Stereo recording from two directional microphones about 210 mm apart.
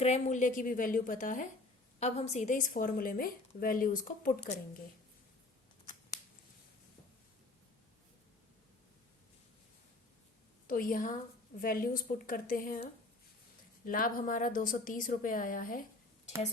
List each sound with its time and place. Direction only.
0.0 s a woman's voice: 35° left (ahead or behind)
10.7 s a woman's voice: 40° left (ahead or behind)
13.8 s a woman's voice: 40° left (ahead or behind)